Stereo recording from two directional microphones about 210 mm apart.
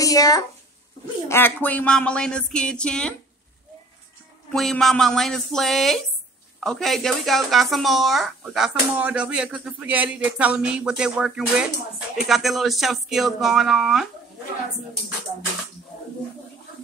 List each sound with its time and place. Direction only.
0.0 s speech: 15° left (ahead or behind)
4.5 s speech: centre (ahead or behind)